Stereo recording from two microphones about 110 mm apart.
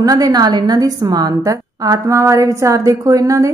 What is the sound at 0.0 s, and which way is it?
A woman's voice, 35° right (ahead or behind).